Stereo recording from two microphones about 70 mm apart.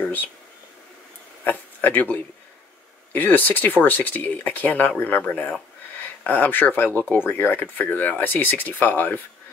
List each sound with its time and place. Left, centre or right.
1.4 s a man's voice: left